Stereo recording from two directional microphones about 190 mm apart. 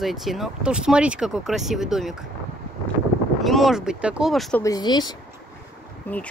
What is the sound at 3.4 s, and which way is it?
Speech, centre (ahead or behind).